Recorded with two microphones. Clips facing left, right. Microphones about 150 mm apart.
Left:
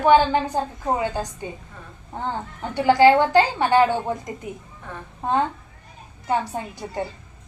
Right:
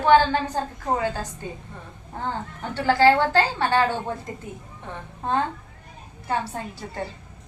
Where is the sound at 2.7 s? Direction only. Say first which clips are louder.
Left 3 dB; 15° left (ahead or behind).